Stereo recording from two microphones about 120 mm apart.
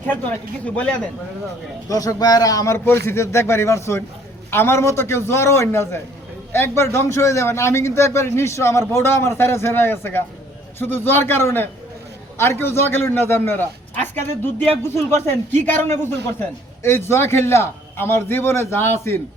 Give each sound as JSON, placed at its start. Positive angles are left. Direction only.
{"t": 0.0, "sound": "speech", "side_deg": 15}
{"t": 1.9, "sound": "a man's voice", "side_deg": 30}
{"t": 2.7, "sound": "a man's voice", "side_deg": 20}